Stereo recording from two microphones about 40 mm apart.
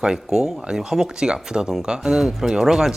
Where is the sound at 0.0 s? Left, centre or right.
Centre.